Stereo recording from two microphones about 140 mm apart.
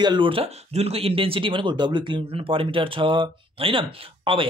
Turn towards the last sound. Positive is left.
turn(degrees=-40)  # may be behind; listen again after turning